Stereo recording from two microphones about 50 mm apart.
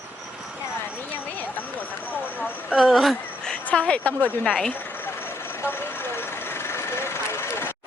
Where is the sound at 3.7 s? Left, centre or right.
Left.